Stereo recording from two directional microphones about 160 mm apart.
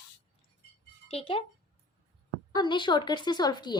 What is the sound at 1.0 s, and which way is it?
Speech, 40° left (ahead or behind).